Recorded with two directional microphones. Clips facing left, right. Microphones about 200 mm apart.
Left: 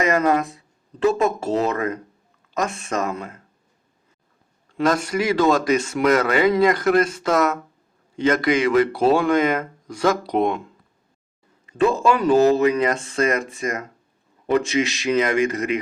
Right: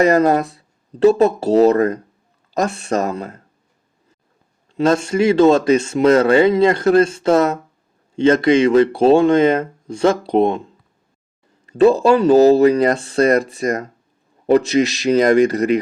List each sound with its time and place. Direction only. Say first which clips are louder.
0.0 s speech: right 5 dB; 35° right (ahead or behind)
4.8 s speech: right 5 dB; 25° right (ahead or behind)
11.6 s speech: right 6 dB; 35° right (ahead or behind)